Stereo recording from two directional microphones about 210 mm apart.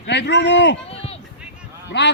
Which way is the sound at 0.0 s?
55° left (ahead or behind).